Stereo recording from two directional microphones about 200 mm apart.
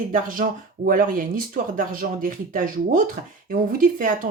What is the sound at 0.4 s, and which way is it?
Speech, 40° right (ahead or behind).